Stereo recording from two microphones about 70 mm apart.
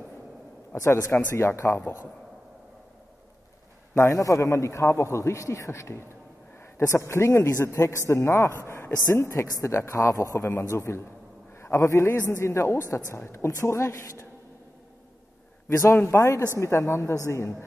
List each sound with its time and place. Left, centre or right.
0.7 s a man's voice: left
3.9 s a man's voice: left
15.7 s a man's voice: left